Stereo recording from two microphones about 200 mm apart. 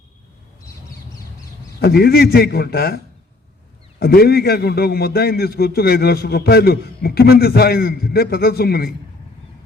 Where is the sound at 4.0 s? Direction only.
50° left (ahead or behind).